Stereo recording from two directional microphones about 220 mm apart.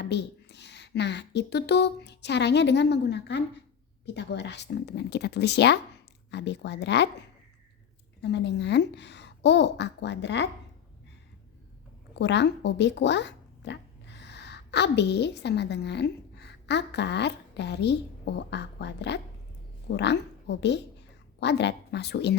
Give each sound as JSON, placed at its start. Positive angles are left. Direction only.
{"t": 0.0, "sound": "a woman's voice", "side_deg": 50}
{"t": 8.2, "sound": "a woman's voice", "side_deg": 50}
{"t": 12.1, "sound": "a woman's voice", "side_deg": 50}